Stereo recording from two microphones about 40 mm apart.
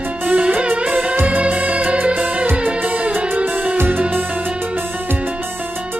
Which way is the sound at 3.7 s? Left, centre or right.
Right.